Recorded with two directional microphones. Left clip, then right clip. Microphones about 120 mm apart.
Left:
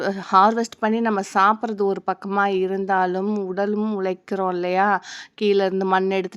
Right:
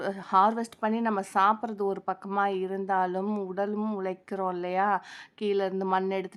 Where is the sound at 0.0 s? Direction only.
35° left (ahead or behind); by 4.0 s 20° left (ahead or behind).